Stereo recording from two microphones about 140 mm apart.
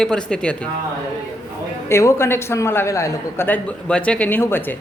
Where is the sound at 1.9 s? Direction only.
20° left (ahead or behind).